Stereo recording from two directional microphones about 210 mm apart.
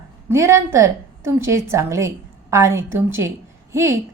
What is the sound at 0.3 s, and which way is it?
A woman's voice, 15° right (ahead or behind).